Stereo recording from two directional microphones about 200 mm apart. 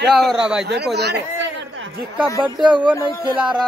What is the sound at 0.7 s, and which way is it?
Speech, 55° right (ahead or behind).